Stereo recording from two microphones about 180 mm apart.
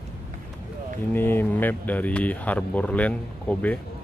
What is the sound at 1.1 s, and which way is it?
Speech, 10° left (ahead or behind).